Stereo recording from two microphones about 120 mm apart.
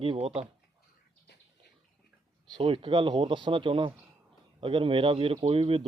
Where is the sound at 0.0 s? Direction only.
55° right (ahead or behind).